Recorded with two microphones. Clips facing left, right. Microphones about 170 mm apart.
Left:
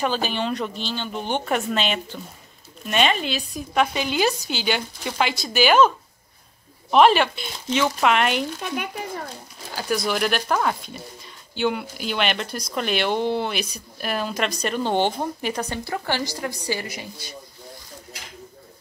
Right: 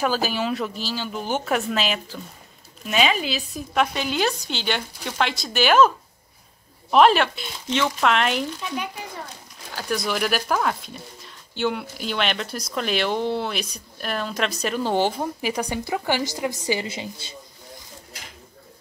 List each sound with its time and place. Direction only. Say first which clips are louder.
0.0 s speech: right 1 dB; 5° right (ahead or behind)
8.5 s speech: left 1 dB; 55° left (ahead or behind)
9.8 s speech: left 2 dB; centre (ahead or behind); by 17.4 s 25° right (ahead or behind)